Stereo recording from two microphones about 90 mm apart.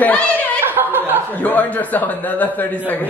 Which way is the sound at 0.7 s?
25° right (ahead or behind).